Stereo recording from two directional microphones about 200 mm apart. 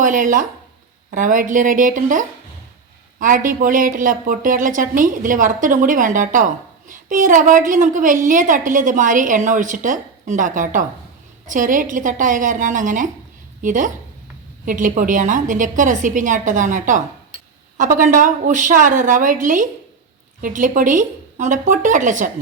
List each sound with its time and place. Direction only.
0.0 s a woman's voice: 40° right (ahead or behind)